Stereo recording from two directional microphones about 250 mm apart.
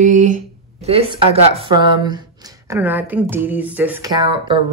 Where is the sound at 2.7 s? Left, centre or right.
Centre.